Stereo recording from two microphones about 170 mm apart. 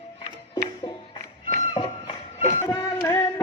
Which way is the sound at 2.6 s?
20° left (ahead or behind).